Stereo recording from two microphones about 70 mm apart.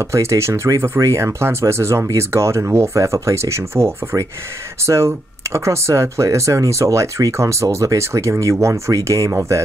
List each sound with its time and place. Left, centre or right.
0.0 s speech: right